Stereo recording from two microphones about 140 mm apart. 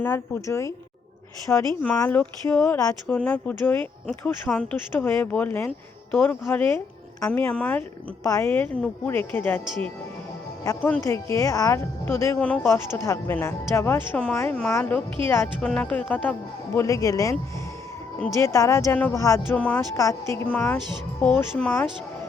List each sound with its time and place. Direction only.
0.0 s a woman's voice: 15° left (ahead or behind)
1.5 s a woman's voice: 10° left (ahead or behind)
8.2 s speech: 20° left (ahead or behind)
11.0 s speech: 20° left (ahead or behind)
16.7 s a woman's voice: 20° left (ahead or behind)
18.3 s a woman's voice: 20° left (ahead or behind)
19.5 s speech: 10° left (ahead or behind)
20.0 s speech: 20° left (ahead or behind)